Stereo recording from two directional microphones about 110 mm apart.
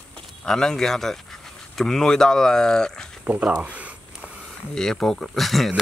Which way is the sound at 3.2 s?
10° right (ahead or behind).